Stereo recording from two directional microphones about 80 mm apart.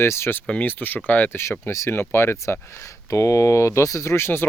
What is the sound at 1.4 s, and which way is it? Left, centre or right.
Speech, left.